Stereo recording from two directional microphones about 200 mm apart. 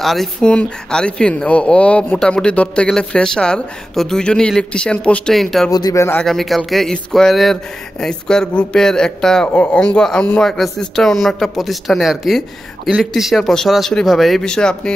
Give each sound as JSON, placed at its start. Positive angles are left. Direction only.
{"t": 0.0, "sound": "a man's voice", "side_deg": 0}
{"t": 5.7, "sound": "speech", "side_deg": 20}
{"t": 6.2, "sound": "a man's voice", "side_deg": 0}